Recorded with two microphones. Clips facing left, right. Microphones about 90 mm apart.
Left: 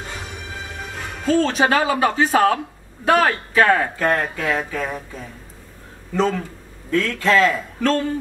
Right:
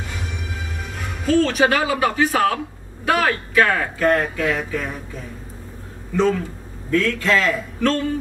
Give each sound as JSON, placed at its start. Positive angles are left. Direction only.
{"t": 1.2, "sound": "speech", "side_deg": 35}
{"t": 6.9, "sound": "speech", "side_deg": 35}